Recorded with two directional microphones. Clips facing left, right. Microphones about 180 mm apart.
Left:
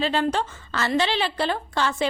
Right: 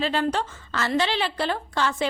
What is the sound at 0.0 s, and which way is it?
A woman's voice, 25° left (ahead or behind).